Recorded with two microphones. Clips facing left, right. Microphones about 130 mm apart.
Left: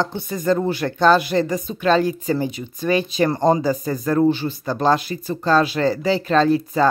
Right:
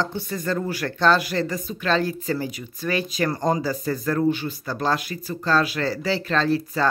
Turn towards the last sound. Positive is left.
turn(degrees=20)  # may be behind; listen again after turning